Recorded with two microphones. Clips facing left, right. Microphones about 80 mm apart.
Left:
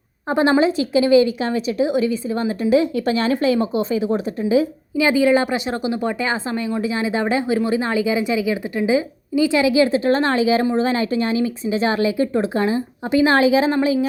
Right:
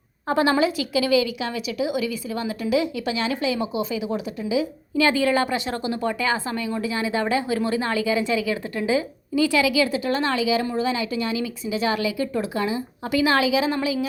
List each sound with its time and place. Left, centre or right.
0.3 s a woman's voice: left
4.9 s a woman's voice: centre; by 13.7 s left